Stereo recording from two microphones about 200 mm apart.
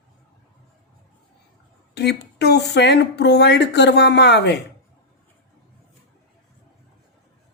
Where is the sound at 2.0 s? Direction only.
55° left (ahead or behind).